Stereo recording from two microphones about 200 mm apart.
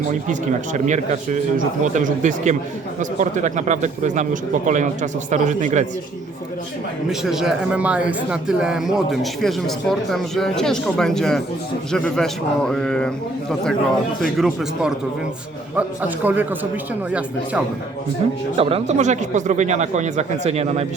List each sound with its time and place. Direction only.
0.1 s speech: 40° right (ahead or behind)
7.1 s a man's voice: centre (ahead or behind)
18.5 s speech: 30° right (ahead or behind)